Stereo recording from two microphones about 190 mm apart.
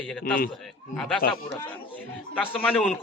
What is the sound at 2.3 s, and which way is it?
Speech, 5° left (ahead or behind).